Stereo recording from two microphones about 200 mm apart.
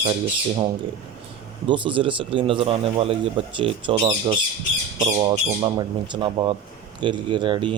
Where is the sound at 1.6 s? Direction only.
25° right (ahead or behind).